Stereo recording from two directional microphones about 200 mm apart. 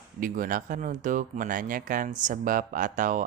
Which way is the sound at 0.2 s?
45° right (ahead or behind).